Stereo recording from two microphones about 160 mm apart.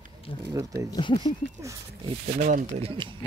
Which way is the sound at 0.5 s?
20° right (ahead or behind).